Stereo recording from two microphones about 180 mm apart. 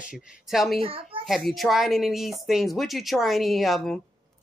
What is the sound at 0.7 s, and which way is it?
Speech, 30° right (ahead or behind).